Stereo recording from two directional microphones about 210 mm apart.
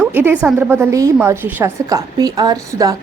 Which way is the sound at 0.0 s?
10° right (ahead or behind).